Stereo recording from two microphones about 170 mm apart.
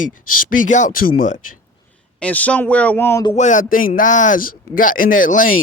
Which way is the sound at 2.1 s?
10° left (ahead or behind).